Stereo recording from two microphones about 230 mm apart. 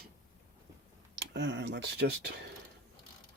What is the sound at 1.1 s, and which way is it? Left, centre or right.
Speech, right.